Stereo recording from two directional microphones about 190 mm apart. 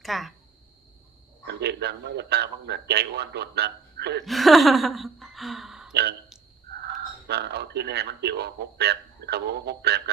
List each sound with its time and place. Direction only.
0.0 s speech: centre (ahead or behind)
1.5 s speech: 60° right (ahead or behind)
4.3 s speech: centre (ahead or behind)
5.9 s speech: 60° right (ahead or behind)
7.3 s speech: 60° right (ahead or behind)